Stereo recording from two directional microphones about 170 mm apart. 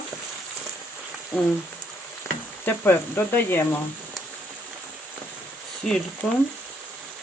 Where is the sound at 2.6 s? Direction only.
15° left (ahead or behind).